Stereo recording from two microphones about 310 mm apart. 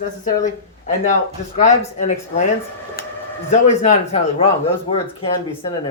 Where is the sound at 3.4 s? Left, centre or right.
Left.